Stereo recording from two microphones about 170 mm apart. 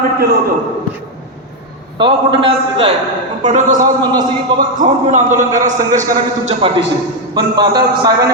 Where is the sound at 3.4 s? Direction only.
45° right (ahead or behind).